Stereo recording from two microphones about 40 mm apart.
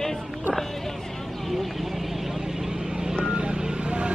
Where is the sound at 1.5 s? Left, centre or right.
Centre.